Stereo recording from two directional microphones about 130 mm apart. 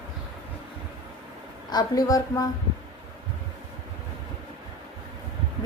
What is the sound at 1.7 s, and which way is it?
Speech, 30° left (ahead or behind).